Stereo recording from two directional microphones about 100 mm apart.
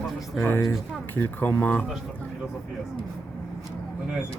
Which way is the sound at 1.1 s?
20° left (ahead or behind).